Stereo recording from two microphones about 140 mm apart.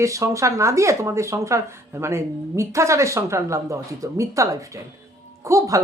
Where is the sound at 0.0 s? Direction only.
20° right (ahead or behind).